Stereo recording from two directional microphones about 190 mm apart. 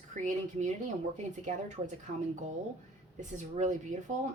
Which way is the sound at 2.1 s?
45° right (ahead or behind).